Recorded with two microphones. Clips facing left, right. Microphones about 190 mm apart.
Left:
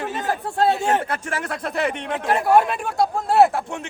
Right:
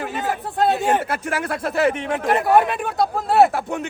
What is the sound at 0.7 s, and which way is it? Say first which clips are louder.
A man's voice: right 1 dB; centre (ahead or behind).